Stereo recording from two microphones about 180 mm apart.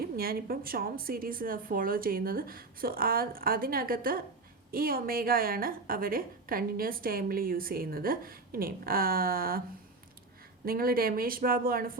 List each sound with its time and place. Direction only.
0.0 s a woman's voice: 55° right (ahead or behind)
10.7 s a woman's voice: 55° right (ahead or behind)